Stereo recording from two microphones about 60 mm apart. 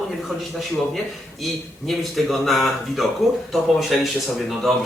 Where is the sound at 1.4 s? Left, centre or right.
Centre.